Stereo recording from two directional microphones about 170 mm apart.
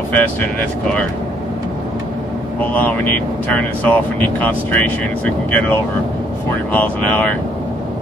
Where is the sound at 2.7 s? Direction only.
10° left (ahead or behind).